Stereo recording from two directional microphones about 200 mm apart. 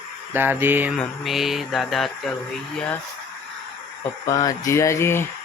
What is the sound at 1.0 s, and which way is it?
Speech, centre (ahead or behind).